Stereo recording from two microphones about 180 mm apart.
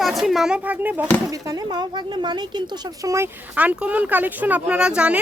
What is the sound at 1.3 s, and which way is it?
Speech, 20° right (ahead or behind).